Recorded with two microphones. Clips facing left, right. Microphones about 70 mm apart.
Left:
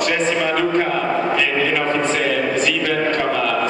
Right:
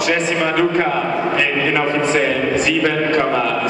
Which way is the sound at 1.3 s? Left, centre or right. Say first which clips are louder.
Right 1 dB; centre.